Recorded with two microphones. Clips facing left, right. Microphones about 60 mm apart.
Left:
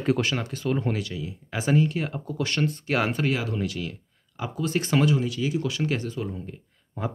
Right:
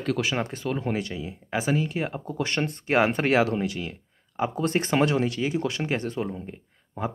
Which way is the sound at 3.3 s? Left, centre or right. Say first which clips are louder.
Right 6 dB; right.